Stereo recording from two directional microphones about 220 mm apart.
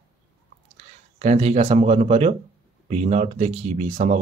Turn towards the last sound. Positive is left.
turn(degrees=-30)  # may be behind; listen again after turning